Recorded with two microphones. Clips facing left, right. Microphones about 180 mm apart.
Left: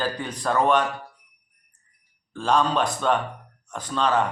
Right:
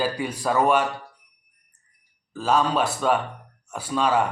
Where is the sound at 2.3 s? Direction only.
5° right (ahead or behind).